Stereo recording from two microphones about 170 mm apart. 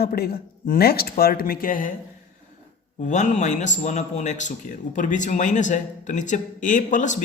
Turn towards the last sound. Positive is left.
turn(degrees=45)  # may be behind; listen again after turning